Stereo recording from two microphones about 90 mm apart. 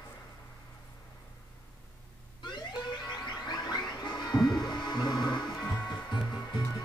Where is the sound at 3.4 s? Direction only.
55° left (ahead or behind).